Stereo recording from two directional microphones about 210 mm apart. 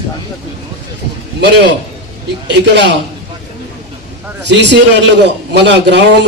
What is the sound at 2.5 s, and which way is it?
Speech, 55° right (ahead or behind).